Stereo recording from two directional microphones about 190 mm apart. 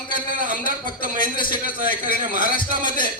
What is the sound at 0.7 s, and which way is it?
Speech, 45° right (ahead or behind).